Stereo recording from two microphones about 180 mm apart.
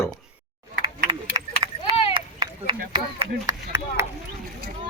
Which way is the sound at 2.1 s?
25° right (ahead or behind).